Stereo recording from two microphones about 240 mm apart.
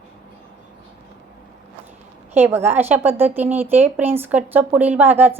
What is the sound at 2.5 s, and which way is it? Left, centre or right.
Speech, centre.